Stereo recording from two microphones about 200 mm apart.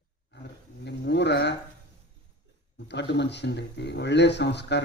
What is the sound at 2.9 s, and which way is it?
A man's voice, 60° left (ahead or behind).